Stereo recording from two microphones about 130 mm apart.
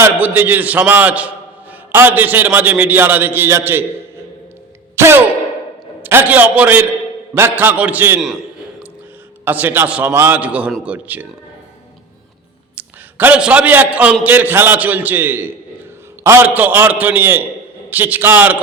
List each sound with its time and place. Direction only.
0.0 s a man's voice: 15° right (ahead or behind)
4.9 s music: 20° right (ahead or behind)
6.0 s a man's voice: 15° right (ahead or behind)
9.4 s a man's voice: 15° right (ahead or behind)
12.7 s a man's voice: 10° right (ahead or behind)